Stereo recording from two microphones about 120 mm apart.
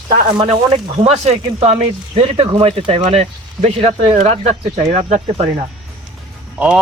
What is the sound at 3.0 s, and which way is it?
Speech, 70° right (ahead or behind).